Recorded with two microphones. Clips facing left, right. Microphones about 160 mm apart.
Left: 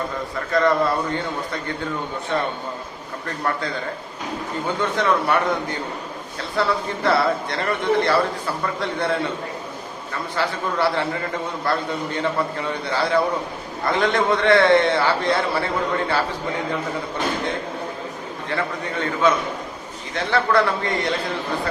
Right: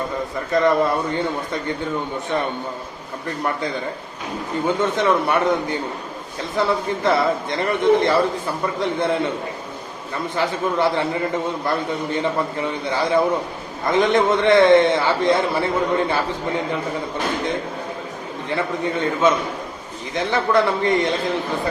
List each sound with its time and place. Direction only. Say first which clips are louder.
0.5 s a man's voice: right 1 dB; 20° right (ahead or behind)
4.8 s a man's voice: even; 20° right (ahead or behind)
10.3 s a man's voice: right 3 dB; 20° right (ahead or behind)
18.4 s a man's voice: right 3 dB; 20° right (ahead or behind)